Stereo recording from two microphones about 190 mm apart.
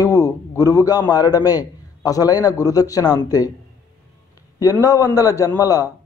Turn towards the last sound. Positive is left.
turn(degrees=20)  # may be behind; listen again after turning